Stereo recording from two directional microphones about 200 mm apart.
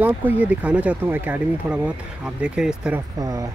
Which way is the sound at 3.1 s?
15° right (ahead or behind).